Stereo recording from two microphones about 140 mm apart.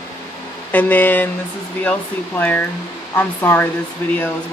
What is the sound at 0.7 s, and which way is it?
Speech, 10° left (ahead or behind).